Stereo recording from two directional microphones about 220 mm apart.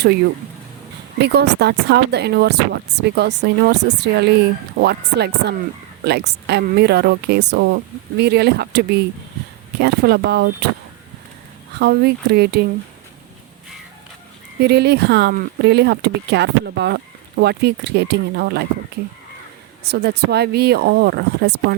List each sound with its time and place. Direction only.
1.2 s speech: 50° right (ahead or behind)
11.8 s speech: 45° right (ahead or behind)
14.6 s speech: 50° right (ahead or behind)
19.8 s speech: 50° right (ahead or behind)